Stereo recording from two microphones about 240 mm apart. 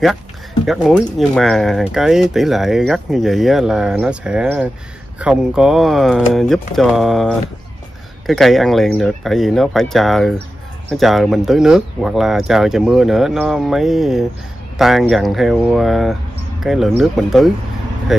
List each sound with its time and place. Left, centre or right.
0.7 s speech: centre